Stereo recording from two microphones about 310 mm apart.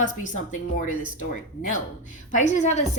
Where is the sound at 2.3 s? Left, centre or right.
Left.